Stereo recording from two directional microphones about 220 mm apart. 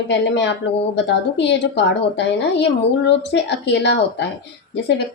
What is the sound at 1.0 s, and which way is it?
A woman's voice, 50° left (ahead or behind).